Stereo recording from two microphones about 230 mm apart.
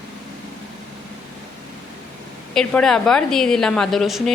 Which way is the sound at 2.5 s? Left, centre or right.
Centre.